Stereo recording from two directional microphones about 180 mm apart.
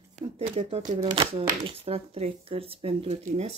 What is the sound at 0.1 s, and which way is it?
Speech, 40° right (ahead or behind).